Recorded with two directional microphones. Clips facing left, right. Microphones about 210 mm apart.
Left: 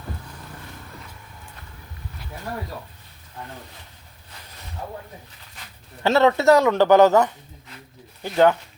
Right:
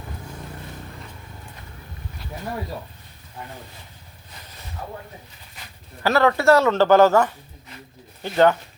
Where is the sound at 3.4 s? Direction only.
10° right (ahead or behind).